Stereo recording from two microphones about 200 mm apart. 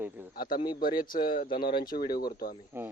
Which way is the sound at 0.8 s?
45° left (ahead or behind).